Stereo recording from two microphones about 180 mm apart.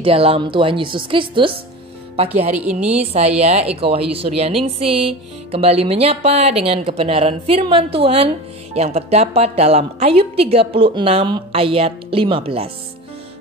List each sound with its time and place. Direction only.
0.0 s a woman's voice: 30° right (ahead or behind)
2.5 s a woman's voice: 5° right (ahead or behind)
3.0 s speech: 35° right (ahead or behind)